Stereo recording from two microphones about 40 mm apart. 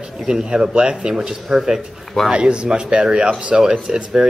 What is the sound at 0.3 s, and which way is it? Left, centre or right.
Speech, centre.